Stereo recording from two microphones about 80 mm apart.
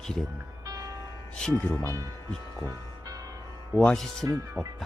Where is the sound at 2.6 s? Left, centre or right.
Right.